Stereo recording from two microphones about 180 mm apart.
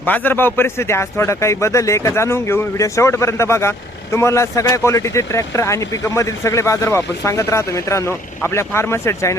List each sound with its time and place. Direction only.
0.0 s a man's voice: 10° left (ahead or behind)